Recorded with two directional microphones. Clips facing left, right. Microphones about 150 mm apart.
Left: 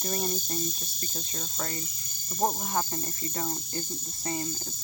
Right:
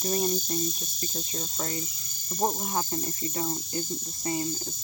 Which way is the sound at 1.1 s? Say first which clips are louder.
Right 2 dB; 35° right (ahead or behind).